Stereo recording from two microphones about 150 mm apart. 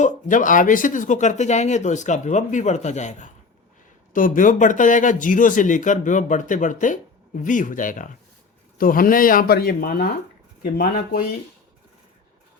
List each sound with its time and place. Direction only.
0.0 s speech: 60° left (ahead or behind); by 10.1 s 90° left
10.6 s speech: 75° left (ahead or behind)